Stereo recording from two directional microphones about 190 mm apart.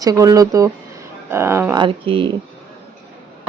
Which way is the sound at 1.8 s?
25° right (ahead or behind).